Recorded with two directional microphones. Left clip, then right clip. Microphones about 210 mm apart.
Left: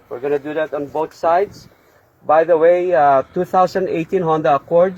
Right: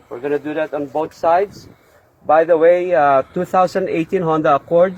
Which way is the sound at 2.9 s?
15° left (ahead or behind).